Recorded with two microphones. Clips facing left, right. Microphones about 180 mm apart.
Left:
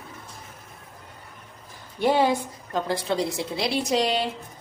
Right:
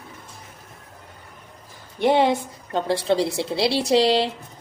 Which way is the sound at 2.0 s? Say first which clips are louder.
Right 3 dB; 25° right (ahead or behind).